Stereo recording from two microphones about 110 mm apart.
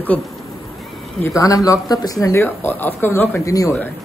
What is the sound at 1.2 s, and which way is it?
Speech, 30° left (ahead or behind).